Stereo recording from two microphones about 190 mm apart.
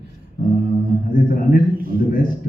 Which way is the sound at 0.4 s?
45° left (ahead or behind).